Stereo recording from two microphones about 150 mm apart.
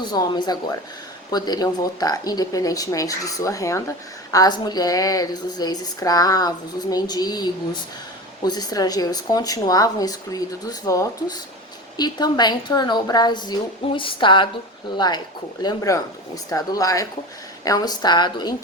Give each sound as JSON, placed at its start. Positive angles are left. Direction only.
{"t": 0.0, "sound": "a woman's voice", "side_deg": 30}